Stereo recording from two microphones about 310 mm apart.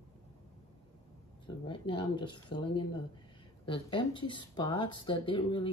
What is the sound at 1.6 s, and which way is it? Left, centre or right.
Speech, centre.